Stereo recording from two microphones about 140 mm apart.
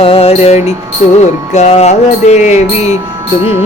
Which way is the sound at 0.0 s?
45° left (ahead or behind).